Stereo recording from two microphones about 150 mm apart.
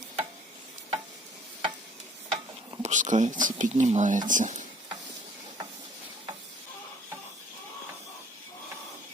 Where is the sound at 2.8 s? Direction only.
55° right (ahead or behind).